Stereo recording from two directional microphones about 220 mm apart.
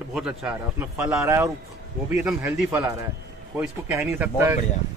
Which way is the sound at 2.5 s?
10° right (ahead or behind).